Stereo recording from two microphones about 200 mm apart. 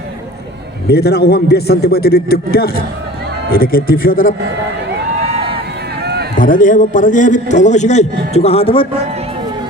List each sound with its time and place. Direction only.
0.9 s a man's voice: 55° left (ahead or behind)
6.0 s run: 55° right (ahead or behind)
6.4 s a man's voice: 40° left (ahead or behind)